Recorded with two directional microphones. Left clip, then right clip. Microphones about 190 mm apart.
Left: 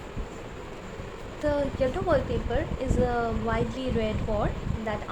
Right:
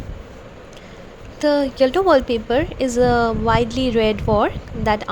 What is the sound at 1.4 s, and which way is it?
A woman's voice, 40° right (ahead or behind).